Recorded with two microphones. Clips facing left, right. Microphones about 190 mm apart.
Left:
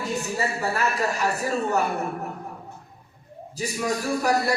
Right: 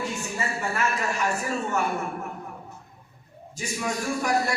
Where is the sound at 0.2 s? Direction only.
35° left (ahead or behind).